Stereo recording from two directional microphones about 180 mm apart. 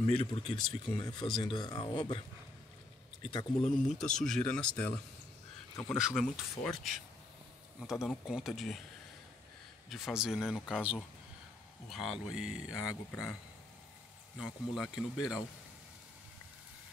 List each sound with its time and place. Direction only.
0.1 s speech: 30° left (ahead or behind)
3.3 s speech: 30° left (ahead or behind)
3.9 s speech: 5° left (ahead or behind)
9.8 s speech: centre (ahead or behind)
14.4 s speech: centre (ahead or behind)